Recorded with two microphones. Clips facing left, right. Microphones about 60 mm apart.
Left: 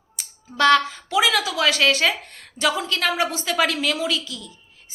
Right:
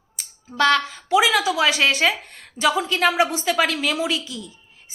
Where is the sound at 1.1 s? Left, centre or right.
Centre.